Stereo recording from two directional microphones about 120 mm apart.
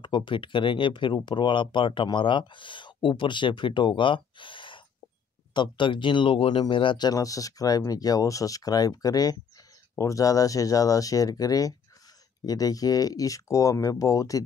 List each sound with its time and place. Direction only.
0.0 s speech: 40° left (ahead or behind)